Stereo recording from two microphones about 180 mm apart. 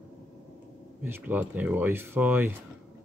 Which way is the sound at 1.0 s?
10° right (ahead or behind).